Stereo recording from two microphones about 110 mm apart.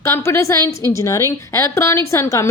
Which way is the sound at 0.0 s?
25° left (ahead or behind).